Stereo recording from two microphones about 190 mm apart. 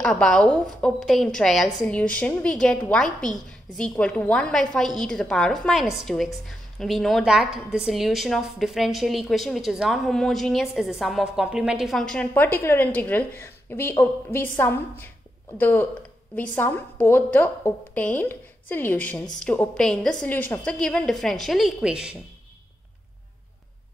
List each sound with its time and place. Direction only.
0.0 s a woman's voice: 5° left (ahead or behind)